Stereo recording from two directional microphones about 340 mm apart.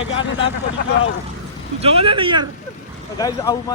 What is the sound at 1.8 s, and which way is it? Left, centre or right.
Speech, centre.